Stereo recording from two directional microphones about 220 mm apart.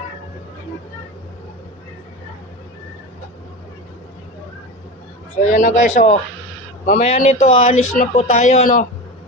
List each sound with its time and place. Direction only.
5.5 s speech: 35° left (ahead or behind)